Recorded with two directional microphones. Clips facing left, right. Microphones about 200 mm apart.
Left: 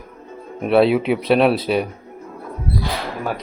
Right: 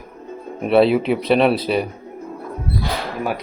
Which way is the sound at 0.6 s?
Centre (ahead or behind).